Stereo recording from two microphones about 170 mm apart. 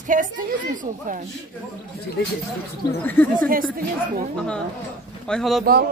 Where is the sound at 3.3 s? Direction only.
55° right (ahead or behind).